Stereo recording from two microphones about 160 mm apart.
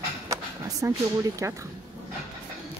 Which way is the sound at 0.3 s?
20° right (ahead or behind).